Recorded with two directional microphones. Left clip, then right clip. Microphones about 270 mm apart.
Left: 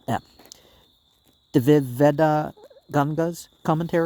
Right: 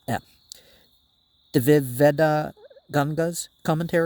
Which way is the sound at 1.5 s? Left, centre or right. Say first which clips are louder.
Left 1 dB; right.